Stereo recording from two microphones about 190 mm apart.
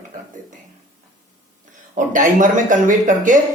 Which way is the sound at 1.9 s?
45° right (ahead or behind).